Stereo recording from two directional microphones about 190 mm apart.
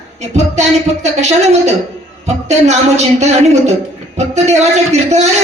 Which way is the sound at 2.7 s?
35° right (ahead or behind).